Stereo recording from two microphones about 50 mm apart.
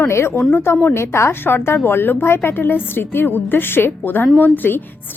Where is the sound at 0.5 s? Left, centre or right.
Left.